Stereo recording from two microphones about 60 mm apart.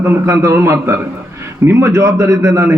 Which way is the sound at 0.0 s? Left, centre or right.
Right.